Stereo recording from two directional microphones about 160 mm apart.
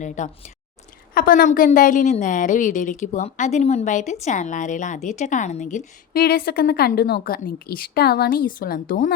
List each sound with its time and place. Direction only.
0.2 s a woman's voice: 50° left (ahead or behind)
1.1 s a woman's voice: 60° left (ahead or behind)
5.7 s a woman's voice: 70° left (ahead or behind)